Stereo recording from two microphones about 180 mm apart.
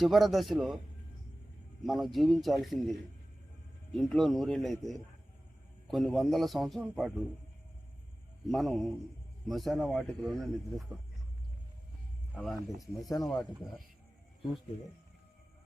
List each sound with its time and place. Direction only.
0.0 s speech: centre (ahead or behind)
1.8 s speech: centre (ahead or behind)
3.9 s speech: 5° left (ahead or behind)
8.4 s speech: centre (ahead or behind)
12.3 s speech: centre (ahead or behind)
12.8 s speech: 20° left (ahead or behind)